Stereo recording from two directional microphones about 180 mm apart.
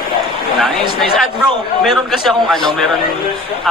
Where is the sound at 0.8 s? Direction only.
35° left (ahead or behind).